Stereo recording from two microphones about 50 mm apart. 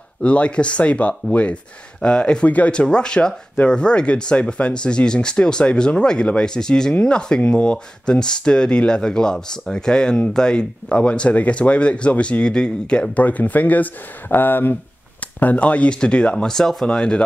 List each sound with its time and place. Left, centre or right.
0.2 s speech: left
2.0 s speech: centre
2.4 s speech: left
13.2 s speech: left
15.3 s speech: left